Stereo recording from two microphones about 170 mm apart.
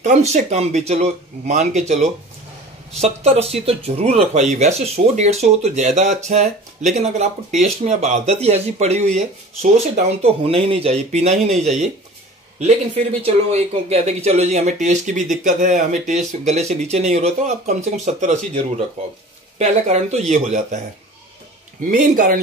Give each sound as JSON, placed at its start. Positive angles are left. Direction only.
{"t": 0.0, "sound": "speech", "side_deg": -45}
{"t": 19.6, "sound": "speech", "side_deg": -40}
{"t": 21.9, "sound": "speech", "side_deg": -50}